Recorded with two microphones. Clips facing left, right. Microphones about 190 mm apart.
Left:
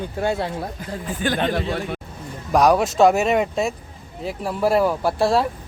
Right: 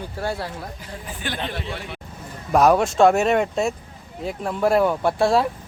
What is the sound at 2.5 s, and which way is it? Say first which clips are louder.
Speech: even; centre (ahead or behind).